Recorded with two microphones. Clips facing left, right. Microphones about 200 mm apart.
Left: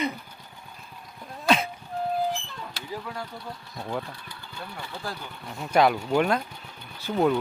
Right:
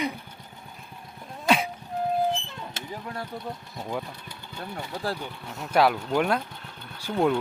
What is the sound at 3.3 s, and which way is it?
Speech, 20° right (ahead or behind).